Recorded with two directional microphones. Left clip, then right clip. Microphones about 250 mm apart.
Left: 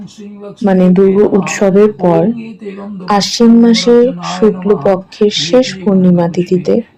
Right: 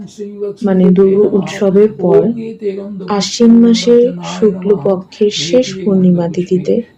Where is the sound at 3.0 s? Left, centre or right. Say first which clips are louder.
Left 2 dB; centre.